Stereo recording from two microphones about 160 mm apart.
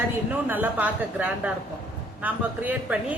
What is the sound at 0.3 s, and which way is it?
Speech, 10° right (ahead or behind).